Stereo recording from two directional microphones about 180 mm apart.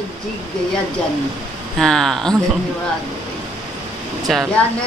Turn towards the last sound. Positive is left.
turn(degrees=0)  # may be behind; listen again after turning